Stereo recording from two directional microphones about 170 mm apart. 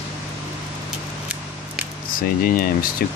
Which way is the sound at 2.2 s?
60° left (ahead or behind).